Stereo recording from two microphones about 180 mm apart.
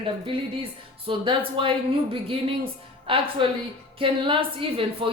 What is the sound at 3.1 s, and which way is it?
A woman's voice, 30° right (ahead or behind).